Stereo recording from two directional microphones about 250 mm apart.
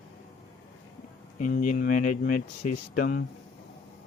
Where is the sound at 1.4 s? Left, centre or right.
Left.